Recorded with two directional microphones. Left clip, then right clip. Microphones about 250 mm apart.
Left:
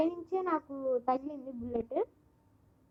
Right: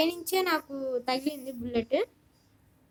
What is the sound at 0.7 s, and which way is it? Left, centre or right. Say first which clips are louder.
Speech: right 1 dB; right.